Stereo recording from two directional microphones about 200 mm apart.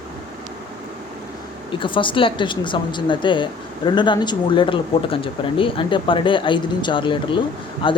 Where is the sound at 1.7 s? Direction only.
25° left (ahead or behind).